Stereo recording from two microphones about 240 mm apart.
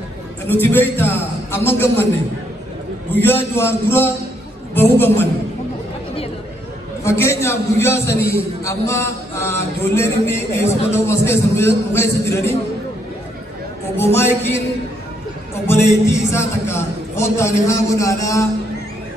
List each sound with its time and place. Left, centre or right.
0.5 s a man's voice: centre
3.2 s a man's voice: centre
7.0 s a man's voice: centre
13.9 s a man's voice: centre
15.6 s a man's voice: centre